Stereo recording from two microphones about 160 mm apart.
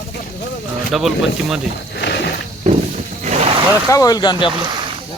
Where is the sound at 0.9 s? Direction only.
Centre (ahead or behind).